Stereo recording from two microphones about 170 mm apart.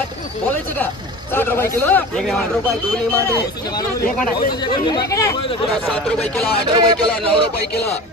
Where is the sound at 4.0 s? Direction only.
55° left (ahead or behind).